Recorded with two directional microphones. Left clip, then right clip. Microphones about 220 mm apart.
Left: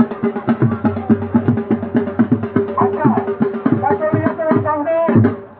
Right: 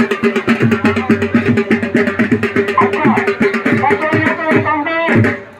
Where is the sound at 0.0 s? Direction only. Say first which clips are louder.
Right 5 dB; 15° left (ahead or behind).